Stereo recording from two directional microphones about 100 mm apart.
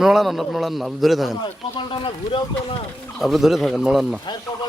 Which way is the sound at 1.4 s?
55° left (ahead or behind).